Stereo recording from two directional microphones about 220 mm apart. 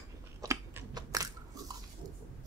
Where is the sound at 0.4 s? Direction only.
15° right (ahead or behind).